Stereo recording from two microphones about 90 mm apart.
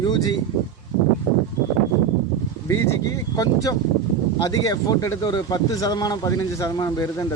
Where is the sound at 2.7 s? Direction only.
35° left (ahead or behind).